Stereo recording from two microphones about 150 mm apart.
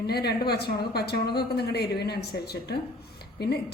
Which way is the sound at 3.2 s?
90° left.